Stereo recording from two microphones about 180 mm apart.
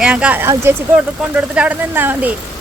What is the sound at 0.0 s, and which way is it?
Speech, 5° right (ahead or behind).